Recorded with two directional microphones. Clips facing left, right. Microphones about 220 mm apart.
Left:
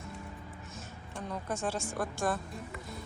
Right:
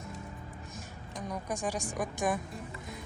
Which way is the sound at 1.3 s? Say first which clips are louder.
Even; 15° right (ahead or behind).